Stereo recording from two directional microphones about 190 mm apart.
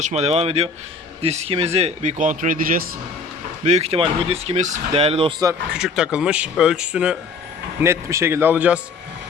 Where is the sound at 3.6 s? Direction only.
35° right (ahead or behind).